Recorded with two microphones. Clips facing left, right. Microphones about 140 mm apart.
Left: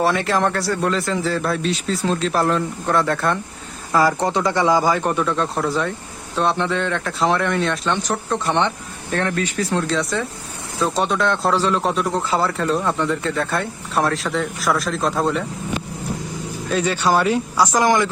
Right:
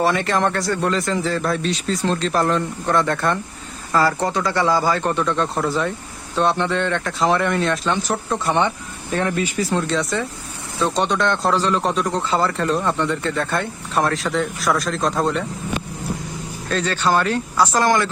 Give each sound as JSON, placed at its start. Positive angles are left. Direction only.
{"t": 0.0, "sound": "speech", "side_deg": 0}
{"t": 3.9, "sound": "speech", "side_deg": 15}
{"t": 16.6, "sound": "speech", "side_deg": 10}